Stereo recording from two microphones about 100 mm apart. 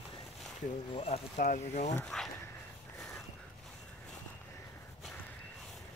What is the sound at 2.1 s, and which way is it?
Speech, 5° left (ahead or behind).